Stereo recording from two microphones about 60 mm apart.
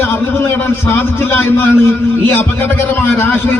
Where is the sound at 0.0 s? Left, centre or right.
Left.